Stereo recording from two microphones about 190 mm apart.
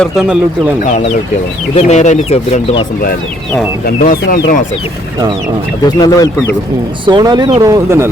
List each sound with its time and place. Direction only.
0.0 s speech: 5° right (ahead or behind)
1.7 s speech: 35° left (ahead or behind)
3.8 s speech: 50° left (ahead or behind)
5.8 s speech: 20° left (ahead or behind)
7.0 s speech: 25° right (ahead or behind)